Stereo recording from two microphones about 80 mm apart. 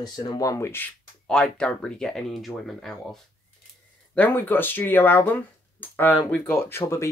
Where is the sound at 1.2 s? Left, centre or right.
Centre.